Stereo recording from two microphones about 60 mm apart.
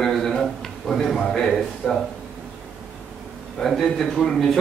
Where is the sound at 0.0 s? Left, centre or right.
Centre.